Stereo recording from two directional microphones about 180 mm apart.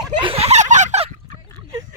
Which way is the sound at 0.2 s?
30° right (ahead or behind).